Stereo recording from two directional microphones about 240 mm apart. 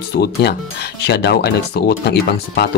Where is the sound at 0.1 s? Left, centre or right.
Left.